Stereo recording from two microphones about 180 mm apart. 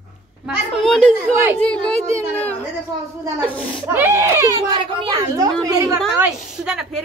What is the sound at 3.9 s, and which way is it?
A woman's voice, 10° right (ahead or behind).